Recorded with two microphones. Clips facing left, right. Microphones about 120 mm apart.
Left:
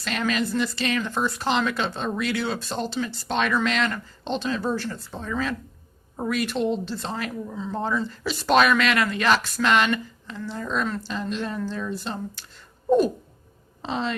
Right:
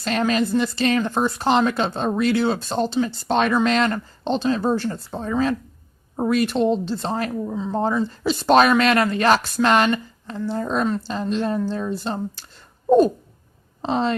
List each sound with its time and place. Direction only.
0.0 s speech: 35° right (ahead or behind)
7.5 s speech: 20° right (ahead or behind)
13.8 s speech: 40° right (ahead or behind)